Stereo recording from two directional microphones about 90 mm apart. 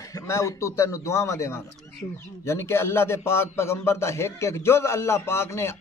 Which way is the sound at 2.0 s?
45° left (ahead or behind).